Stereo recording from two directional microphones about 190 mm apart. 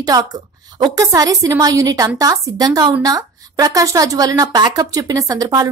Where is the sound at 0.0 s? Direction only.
20° right (ahead or behind).